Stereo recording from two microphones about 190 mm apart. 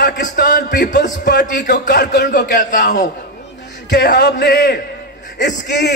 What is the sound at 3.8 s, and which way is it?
Speech, 60° left (ahead or behind).